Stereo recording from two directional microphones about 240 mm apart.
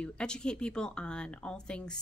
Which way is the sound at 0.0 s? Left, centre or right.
Centre.